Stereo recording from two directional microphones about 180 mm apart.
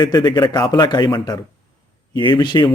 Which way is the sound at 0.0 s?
25° left (ahead or behind).